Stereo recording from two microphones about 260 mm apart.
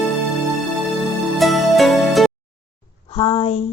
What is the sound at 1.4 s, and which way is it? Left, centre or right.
Music, centre.